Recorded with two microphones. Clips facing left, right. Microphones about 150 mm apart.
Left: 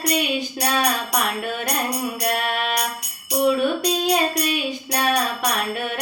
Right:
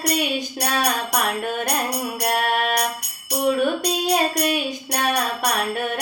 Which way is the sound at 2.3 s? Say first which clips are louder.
Right 5 dB; 50° right (ahead or behind).